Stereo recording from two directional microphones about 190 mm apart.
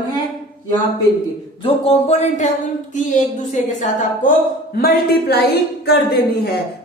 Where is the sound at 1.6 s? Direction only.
35° left (ahead or behind).